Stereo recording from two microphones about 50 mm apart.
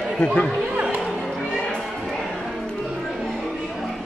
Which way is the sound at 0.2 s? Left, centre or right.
Centre.